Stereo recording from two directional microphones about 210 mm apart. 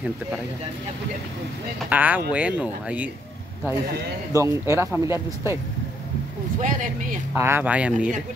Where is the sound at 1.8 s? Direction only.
5° right (ahead or behind).